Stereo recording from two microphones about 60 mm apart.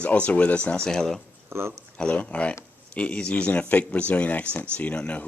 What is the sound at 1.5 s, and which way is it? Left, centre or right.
Speech, right.